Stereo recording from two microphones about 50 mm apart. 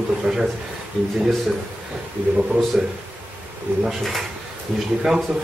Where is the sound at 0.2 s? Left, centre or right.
Centre.